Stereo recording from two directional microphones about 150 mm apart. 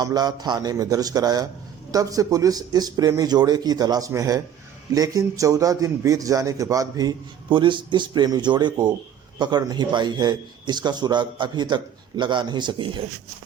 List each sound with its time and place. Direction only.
0.0 s a man's voice: 25° right (ahead or behind)